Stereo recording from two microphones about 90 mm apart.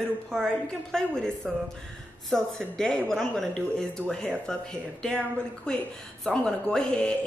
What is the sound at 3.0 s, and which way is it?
Speech, 5° left (ahead or behind).